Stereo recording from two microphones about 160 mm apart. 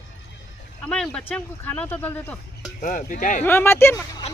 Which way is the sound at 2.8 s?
55° left (ahead or behind).